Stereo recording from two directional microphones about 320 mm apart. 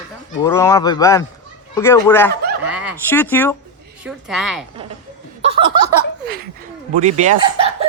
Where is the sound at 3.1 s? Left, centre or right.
Centre.